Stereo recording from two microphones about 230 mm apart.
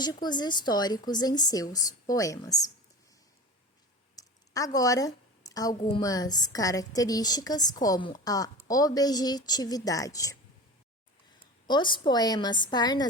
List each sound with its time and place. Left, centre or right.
0.0 s a woman's voice: centre
4.1 s a woman's voice: centre
11.7 s a woman's voice: centre